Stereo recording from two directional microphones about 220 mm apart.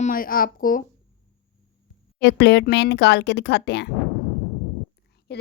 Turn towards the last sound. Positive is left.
turn(degrees=50)  # may be behind; listen again after turning